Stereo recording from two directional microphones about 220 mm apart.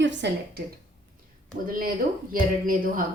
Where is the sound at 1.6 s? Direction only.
40° right (ahead or behind).